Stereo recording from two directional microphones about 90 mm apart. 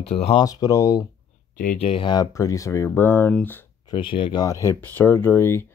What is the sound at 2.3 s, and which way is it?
Speech, 35° left (ahead or behind).